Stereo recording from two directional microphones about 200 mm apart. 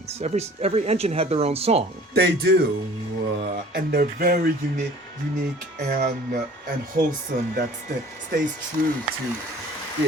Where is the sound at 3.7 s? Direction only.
45° right (ahead or behind).